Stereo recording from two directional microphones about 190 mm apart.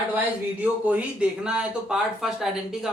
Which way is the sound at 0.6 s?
10° right (ahead or behind).